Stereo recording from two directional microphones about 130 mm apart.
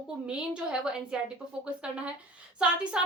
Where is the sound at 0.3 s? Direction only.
5° right (ahead or behind).